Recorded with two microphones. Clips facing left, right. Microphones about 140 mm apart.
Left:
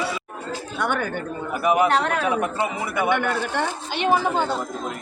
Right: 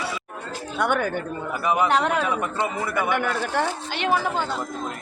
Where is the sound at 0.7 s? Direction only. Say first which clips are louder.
Right 2 dB; 10° right (ahead or behind).